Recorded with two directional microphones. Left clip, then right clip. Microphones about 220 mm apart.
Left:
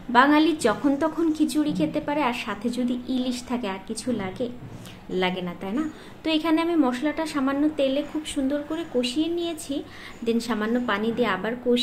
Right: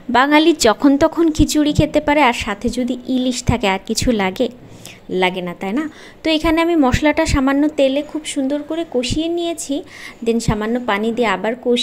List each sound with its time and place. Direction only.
0.1 s a woman's voice: 35° right (ahead or behind)